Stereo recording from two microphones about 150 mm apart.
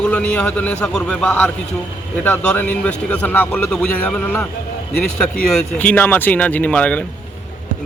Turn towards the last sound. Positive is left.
turn(degrees=10)  # may be behind; listen again after turning